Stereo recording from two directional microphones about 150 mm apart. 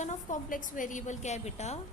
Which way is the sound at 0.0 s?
55° left (ahead or behind).